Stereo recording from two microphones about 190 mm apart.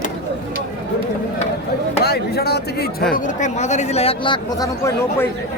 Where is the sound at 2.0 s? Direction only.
55° left (ahead or behind).